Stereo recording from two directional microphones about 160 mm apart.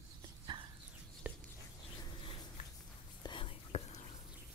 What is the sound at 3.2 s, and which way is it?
Whispering, 30° left (ahead or behind).